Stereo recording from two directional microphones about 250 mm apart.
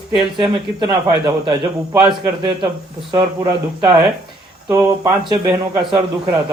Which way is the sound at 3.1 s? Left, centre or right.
Centre.